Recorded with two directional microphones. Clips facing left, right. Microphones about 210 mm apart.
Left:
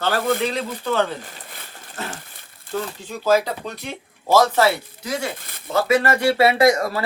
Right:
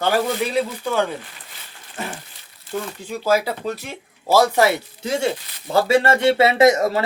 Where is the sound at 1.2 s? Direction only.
55° left (ahead or behind).